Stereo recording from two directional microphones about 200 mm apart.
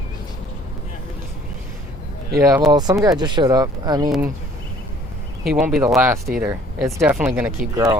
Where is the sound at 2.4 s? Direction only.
20° right (ahead or behind).